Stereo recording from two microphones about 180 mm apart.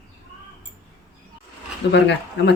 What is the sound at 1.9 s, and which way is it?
Speech, 75° left (ahead or behind).